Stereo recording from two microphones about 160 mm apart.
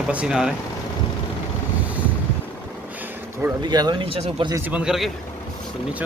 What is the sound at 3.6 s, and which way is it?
Speech, 25° right (ahead or behind).